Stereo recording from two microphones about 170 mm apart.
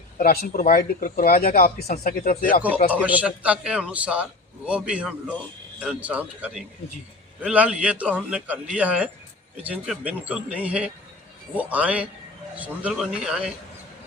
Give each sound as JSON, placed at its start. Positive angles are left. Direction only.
{"t": 0.2, "sound": "speech", "side_deg": 55}
{"t": 2.9, "sound": "a man's voice", "side_deg": -10}